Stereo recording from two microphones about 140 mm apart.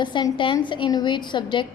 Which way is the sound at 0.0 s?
35° left (ahead or behind).